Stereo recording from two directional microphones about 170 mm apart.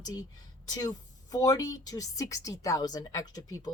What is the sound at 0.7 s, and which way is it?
A woman's voice, 20° left (ahead or behind).